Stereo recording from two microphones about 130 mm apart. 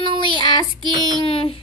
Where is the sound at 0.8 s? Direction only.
35° right (ahead or behind).